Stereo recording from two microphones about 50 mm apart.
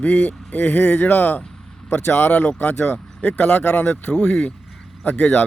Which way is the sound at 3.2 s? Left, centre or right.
Left.